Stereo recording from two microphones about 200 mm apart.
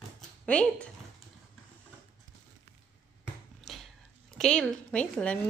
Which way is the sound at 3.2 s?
Centre (ahead or behind).